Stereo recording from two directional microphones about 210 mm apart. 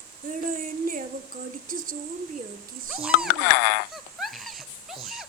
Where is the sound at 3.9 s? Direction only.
Centre (ahead or behind).